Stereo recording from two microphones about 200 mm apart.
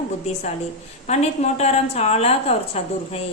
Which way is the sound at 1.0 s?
35° left (ahead or behind).